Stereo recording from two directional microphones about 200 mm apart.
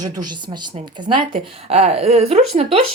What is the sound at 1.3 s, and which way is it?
A woman's voice, 35° right (ahead or behind).